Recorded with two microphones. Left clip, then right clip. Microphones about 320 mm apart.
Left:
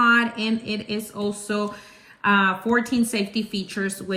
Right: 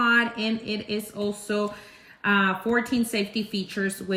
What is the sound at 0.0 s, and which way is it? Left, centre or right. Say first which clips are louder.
A woman's voice: left 3 dB; centre.